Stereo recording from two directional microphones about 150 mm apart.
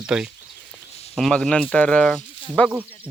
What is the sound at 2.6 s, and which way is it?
Speech, 10° right (ahead or behind).